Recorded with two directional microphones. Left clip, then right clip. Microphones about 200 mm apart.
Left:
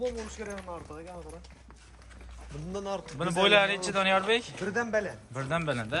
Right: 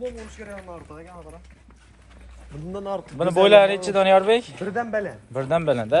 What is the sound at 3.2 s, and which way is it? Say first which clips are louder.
A man's voice: right 10 dB; centre (ahead or behind).